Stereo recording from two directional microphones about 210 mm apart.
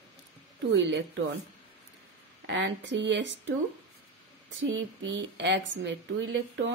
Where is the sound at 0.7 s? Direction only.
60° right (ahead or behind).